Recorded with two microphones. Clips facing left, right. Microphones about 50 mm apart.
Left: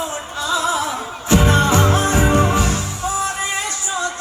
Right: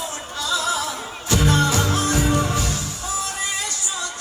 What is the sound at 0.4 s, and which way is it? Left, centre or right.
Music, left.